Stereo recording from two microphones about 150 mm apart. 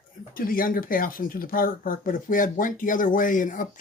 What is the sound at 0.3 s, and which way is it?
Speech, 75° left (ahead or behind).